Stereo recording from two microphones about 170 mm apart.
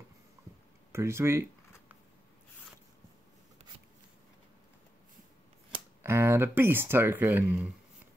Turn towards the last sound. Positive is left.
turn(degrees=-10)  # may be behind; listen again after turning